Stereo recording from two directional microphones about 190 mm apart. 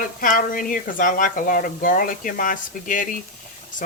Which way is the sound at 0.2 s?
45° left (ahead or behind).